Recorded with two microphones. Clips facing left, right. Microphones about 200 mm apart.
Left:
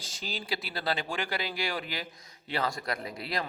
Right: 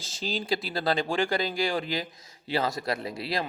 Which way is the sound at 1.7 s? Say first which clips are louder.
Right 6 dB; 30° right (ahead or behind).